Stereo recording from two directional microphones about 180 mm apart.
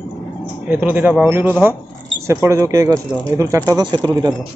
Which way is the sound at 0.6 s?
10° right (ahead or behind).